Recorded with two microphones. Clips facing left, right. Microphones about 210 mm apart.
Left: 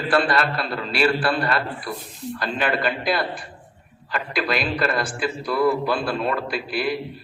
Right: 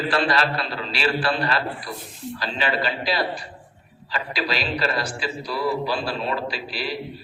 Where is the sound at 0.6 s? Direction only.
50° left (ahead or behind).